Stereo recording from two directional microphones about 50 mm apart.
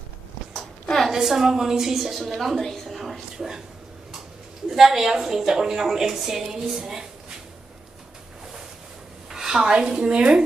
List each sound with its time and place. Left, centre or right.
0.9 s a woman's voice: centre
4.6 s a woman's voice: centre
9.3 s a woman's voice: centre